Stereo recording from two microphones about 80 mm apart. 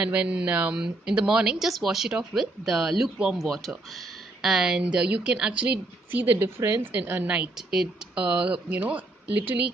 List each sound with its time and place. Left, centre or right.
0.0 s a woman's voice: centre
3.4 s a woman's voice: centre
7.5 s a woman's voice: centre; by 9.7 s right